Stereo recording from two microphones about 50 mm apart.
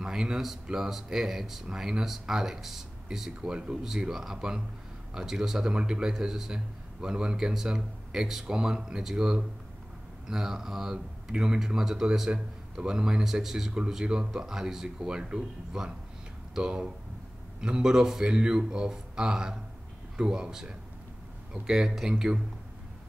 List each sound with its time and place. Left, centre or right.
0.0 s speech: centre